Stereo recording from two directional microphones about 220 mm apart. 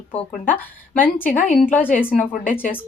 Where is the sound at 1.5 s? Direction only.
5° left (ahead or behind).